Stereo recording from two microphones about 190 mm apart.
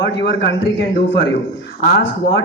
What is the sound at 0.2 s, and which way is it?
Speech, 65° left (ahead or behind).